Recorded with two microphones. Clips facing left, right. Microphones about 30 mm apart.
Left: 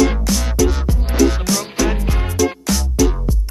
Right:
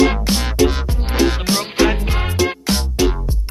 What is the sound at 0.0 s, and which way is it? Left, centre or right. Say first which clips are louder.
Music: right 1 dB; right.